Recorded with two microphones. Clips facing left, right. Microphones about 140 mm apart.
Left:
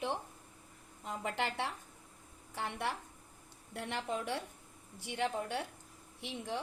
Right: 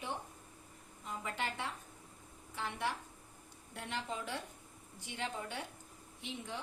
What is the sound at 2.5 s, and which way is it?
A woman's voice, 65° left (ahead or behind).